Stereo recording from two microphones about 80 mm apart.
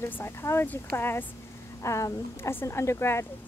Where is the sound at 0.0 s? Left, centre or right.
Left.